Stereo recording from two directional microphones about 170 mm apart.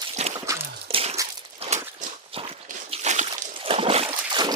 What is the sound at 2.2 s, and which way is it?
Walk, 35° right (ahead or behind).